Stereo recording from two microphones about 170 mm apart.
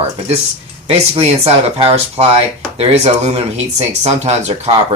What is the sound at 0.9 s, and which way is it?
Speech, 35° right (ahead or behind).